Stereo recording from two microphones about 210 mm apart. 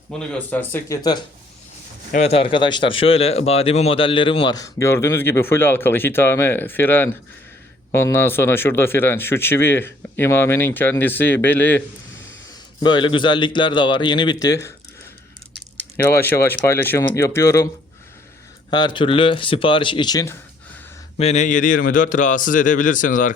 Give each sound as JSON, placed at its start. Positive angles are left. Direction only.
{"t": 0.1, "sound": "speech", "side_deg": 5}
{"t": 2.1, "sound": "speech", "side_deg": 30}
{"t": 12.8, "sound": "speech", "side_deg": 20}
{"t": 16.0, "sound": "speech", "side_deg": 10}
{"t": 18.7, "sound": "speech", "side_deg": 20}
{"t": 21.2, "sound": "a man's voice", "side_deg": 30}